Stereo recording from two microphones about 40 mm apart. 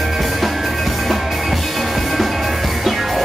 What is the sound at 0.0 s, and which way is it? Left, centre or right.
Music, centre.